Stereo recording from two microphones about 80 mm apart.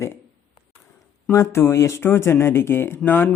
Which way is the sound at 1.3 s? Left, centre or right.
Left.